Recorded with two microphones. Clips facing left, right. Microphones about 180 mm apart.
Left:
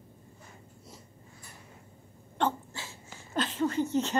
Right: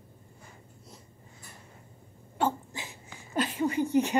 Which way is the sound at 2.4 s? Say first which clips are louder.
Right 1 dB; 15° right (ahead or behind).